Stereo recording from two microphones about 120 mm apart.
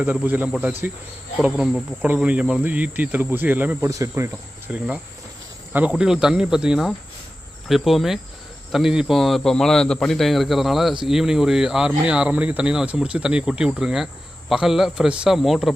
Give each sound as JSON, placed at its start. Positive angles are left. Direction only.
{"t": 0.0, "sound": "speech", "side_deg": -15}
{"t": 3.8, "sound": "cricket", "side_deg": -25}
{"t": 4.7, "sound": "speech", "side_deg": -10}